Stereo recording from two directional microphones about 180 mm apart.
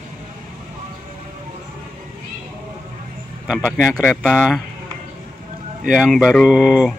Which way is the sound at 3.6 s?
10° left (ahead or behind).